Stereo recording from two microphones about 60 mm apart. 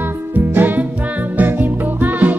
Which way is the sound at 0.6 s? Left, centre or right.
Right.